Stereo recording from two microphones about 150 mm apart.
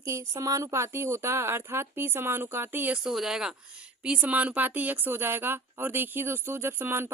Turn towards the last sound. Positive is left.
turn(degrees=-15)  # may be behind; listen again after turning